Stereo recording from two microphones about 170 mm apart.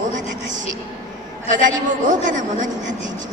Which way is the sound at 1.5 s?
50° right (ahead or behind).